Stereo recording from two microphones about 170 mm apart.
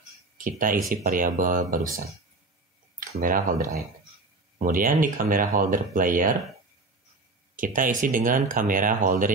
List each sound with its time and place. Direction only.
0.4 s speech: 55° right (ahead or behind)
3.2 s speech: 55° right (ahead or behind)
4.6 s speech: 55° right (ahead or behind)
7.5 s speech: 55° right (ahead or behind)